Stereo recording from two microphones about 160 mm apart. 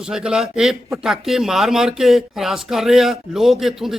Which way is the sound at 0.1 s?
5° right (ahead or behind).